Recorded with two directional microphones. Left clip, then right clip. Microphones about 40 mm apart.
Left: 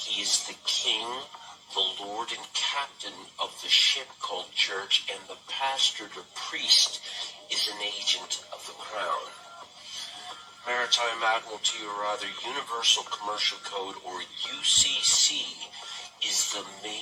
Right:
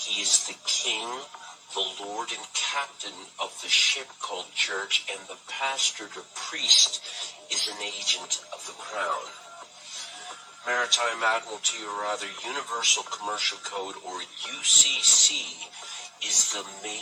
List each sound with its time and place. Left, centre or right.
0.0 s speech: right